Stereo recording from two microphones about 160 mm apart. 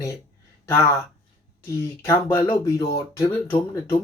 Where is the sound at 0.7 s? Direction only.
15° left (ahead or behind).